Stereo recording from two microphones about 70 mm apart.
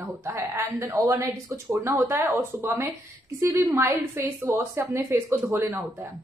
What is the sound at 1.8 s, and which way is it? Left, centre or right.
Speech, right.